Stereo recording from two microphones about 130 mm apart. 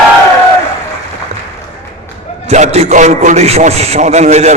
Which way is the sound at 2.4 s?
60° right (ahead or behind).